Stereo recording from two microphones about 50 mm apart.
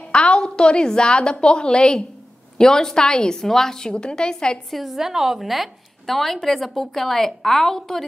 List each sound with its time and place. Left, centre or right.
0.1 s a woman's voice: centre
4.6 s a woman's voice: centre